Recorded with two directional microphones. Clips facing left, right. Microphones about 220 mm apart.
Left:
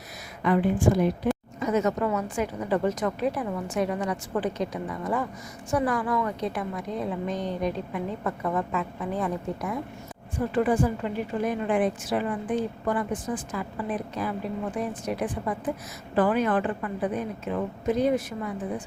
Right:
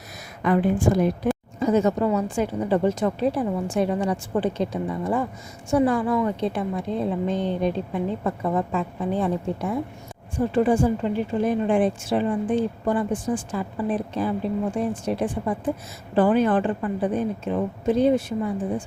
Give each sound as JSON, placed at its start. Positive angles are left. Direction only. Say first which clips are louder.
{"t": 1.5, "sound": "a woman's voice", "louder": "right 7 dB", "side_deg": -30}